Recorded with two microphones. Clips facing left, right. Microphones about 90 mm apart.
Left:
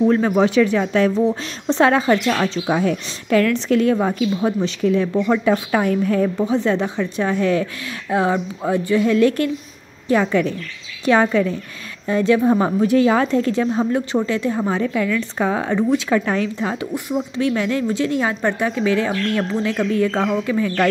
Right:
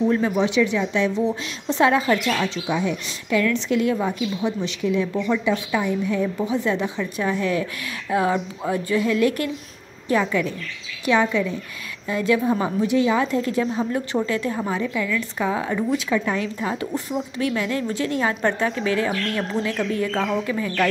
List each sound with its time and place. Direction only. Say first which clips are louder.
0.1 s a woman's voice: left 4 dB; 40° left (ahead or behind)
6.4 s a woman's voice: left 4 dB; 35° left (ahead or behind)
13.5 s speech: left 4 dB; 30° left (ahead or behind)
14.7 s a woman's voice: left 4 dB; 35° left (ahead or behind)
16.5 s speech: left 2 dB; 25° left (ahead or behind)